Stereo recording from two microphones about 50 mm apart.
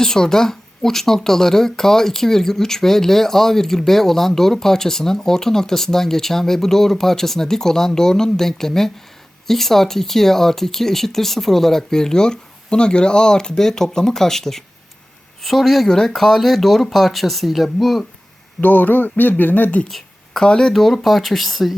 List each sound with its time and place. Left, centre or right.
0.0 s speech: centre
18.6 s speech: left
19.9 s a sound: centre
20.7 s speech: centre